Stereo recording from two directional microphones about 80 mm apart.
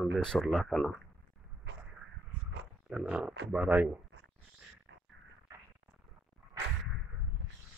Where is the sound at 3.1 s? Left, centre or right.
Centre.